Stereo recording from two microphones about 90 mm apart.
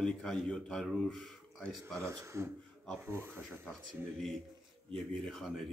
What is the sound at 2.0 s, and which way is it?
Speech, 30° right (ahead or behind).